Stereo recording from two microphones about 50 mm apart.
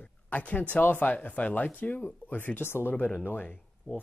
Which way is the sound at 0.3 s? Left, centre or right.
Left.